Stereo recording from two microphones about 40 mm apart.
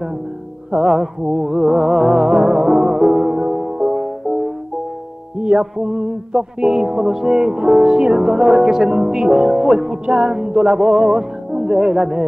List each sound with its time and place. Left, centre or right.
0.7 s music: centre
5.4 s music: right